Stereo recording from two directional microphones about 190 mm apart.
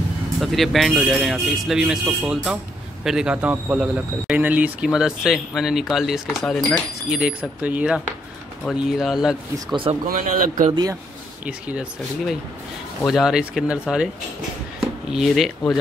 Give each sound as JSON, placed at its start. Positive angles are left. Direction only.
{"t": 0.4, "sound": "a man's voice", "side_deg": 0}
{"t": 10.0, "sound": "speech", "side_deg": -45}
{"t": 10.7, "sound": "speech", "side_deg": -20}
{"t": 11.4, "sound": "a man's voice", "side_deg": -5}
{"t": 15.1, "sound": "a man's voice", "side_deg": 0}